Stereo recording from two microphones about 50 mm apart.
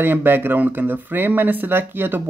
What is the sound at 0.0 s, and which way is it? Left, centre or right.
Speech, right.